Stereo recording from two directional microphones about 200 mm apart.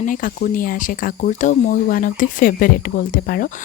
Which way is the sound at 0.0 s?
40° left (ahead or behind).